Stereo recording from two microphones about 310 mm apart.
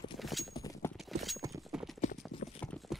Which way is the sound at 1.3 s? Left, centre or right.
Centre.